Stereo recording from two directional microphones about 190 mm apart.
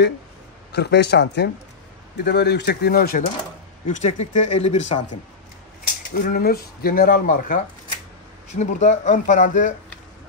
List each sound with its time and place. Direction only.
0.7 s speech: 60° left (ahead or behind)
3.9 s speech: 40° left (ahead or behind)
6.1 s speech: 50° left (ahead or behind)